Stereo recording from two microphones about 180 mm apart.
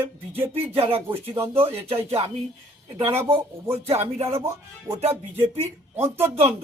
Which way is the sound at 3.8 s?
35° right (ahead or behind).